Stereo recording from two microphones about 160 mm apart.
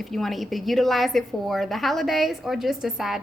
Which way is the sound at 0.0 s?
Centre (ahead or behind).